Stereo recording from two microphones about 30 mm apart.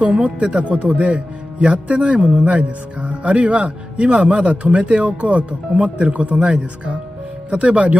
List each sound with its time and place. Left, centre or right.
0.2 s speech: right
2.4 s speech: right
7.5 s speech: right